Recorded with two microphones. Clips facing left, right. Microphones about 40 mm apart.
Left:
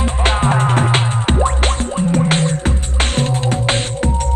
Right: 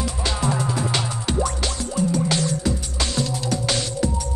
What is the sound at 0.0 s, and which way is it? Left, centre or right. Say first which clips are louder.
Music: left 7 dB; left.